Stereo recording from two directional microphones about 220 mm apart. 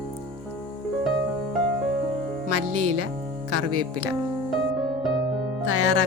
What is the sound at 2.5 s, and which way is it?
Music, 90° right.